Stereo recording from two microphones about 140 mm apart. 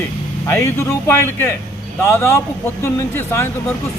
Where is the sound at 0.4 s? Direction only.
20° left (ahead or behind).